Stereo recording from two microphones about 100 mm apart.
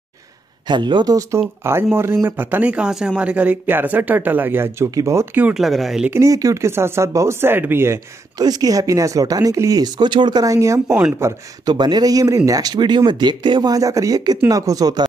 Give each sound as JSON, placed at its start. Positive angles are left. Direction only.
{"t": 0.7, "sound": "speech", "side_deg": -50}
{"t": 1.6, "sound": "speech", "side_deg": -25}
{"t": 5.5, "sound": "speech", "side_deg": 0}
{"t": 6.1, "sound": "speech", "side_deg": -35}
{"t": 8.4, "sound": "speech", "side_deg": -40}
{"t": 9.9, "sound": "speech", "side_deg": -50}
{"t": 11.6, "sound": "speech", "side_deg": -45}